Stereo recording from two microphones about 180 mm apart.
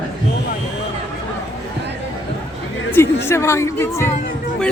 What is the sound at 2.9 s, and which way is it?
Speech, 15° left (ahead or behind).